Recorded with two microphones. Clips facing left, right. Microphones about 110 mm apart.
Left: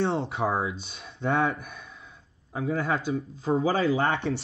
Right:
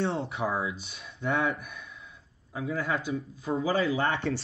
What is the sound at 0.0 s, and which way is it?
Speech, 30° left (ahead or behind).